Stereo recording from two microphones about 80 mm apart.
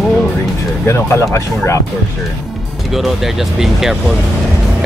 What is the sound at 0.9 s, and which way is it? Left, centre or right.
Speech, left.